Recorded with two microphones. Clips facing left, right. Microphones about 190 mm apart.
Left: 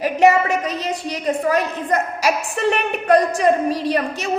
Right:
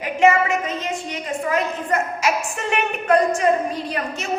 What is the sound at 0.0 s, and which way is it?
A woman's voice, 35° left (ahead or behind).